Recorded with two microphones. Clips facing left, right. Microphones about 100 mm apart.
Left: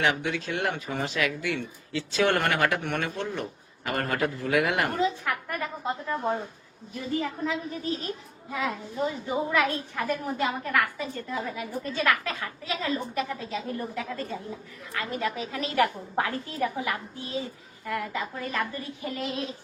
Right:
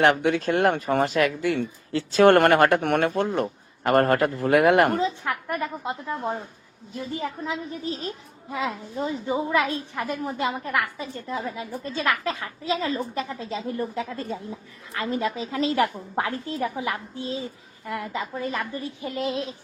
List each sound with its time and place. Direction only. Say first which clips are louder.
0.0 s speech: right 7 dB; 50° right (ahead or behind)
4.9 s a woman's voice: right 1 dB; 30° right (ahead or behind)